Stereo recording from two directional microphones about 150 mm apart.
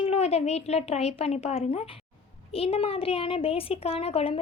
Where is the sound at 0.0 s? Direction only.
45° left (ahead or behind).